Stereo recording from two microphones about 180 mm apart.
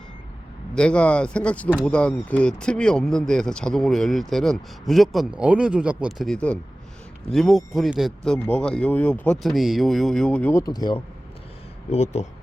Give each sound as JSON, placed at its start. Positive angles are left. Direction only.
{"t": 0.7, "sound": "speech", "side_deg": 5}